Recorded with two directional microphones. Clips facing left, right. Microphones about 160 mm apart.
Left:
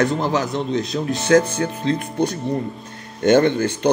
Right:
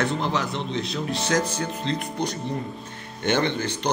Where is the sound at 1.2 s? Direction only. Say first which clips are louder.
Left 10 dB; 55° left (ahead or behind).